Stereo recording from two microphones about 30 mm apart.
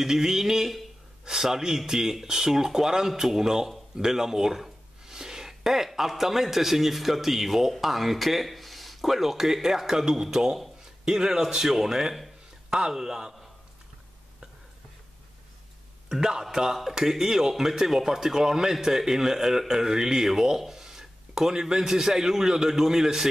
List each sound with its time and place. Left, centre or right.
0.0 s a man's voice: centre
5.0 s a sound: centre
5.6 s a man's voice: centre; by 11.3 s right
11.6 s a man's voice: centre
16.1 s a man's voice: centre